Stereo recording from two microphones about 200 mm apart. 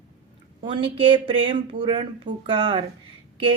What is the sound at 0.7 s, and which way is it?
Speech, 25° right (ahead or behind).